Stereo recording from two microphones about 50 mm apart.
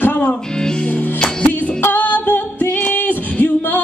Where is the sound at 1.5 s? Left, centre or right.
Left.